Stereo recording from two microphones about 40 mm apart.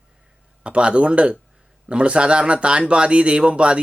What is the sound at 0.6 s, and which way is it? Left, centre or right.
Speech, right.